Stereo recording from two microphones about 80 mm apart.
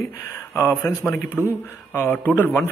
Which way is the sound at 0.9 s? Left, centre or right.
Left.